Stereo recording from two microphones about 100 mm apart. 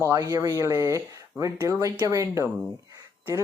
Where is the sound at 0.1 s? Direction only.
35° right (ahead or behind).